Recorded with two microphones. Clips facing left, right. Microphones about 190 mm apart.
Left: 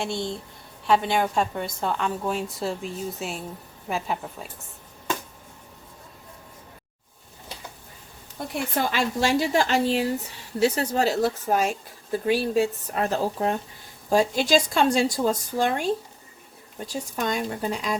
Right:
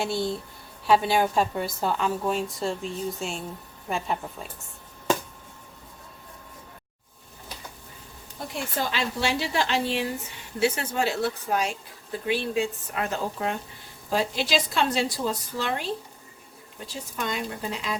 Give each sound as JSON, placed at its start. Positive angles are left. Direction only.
{"t": 0.0, "sound": "a woman's voice", "side_deg": -5}
{"t": 8.5, "sound": "a woman's voice", "side_deg": 50}